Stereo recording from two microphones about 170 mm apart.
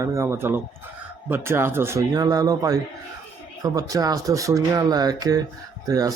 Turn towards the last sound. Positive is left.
turn(degrees=-20)  # may be behind; listen again after turning